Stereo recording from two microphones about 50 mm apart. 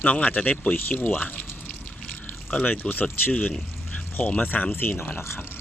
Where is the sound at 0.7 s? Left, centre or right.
Left.